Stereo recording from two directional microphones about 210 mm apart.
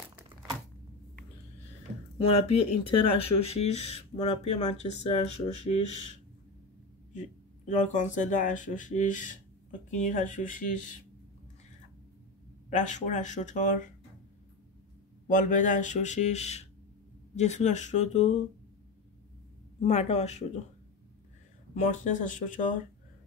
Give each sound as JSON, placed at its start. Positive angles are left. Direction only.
{"t": 2.1, "sound": "speech", "side_deg": 25}
{"t": 7.2, "sound": "speech", "side_deg": 35}
{"t": 12.6, "sound": "speech", "side_deg": 35}
{"t": 15.2, "sound": "speech", "side_deg": 35}
{"t": 19.8, "sound": "speech", "side_deg": 30}
{"t": 22.1, "sound": "speech", "side_deg": 35}